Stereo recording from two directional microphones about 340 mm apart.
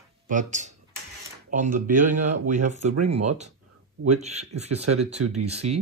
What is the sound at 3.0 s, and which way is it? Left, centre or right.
Speech, right.